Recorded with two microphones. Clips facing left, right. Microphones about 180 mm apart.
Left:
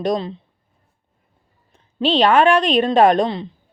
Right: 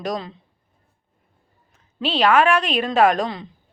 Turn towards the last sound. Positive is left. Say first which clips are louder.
# left 4 dB
turn(degrees=25)  # may be behind; listen again after turning